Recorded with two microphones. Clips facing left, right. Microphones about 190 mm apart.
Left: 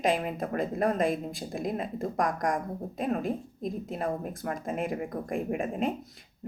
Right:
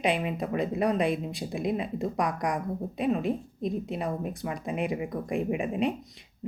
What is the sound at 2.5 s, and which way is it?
Speech, 45° left (ahead or behind).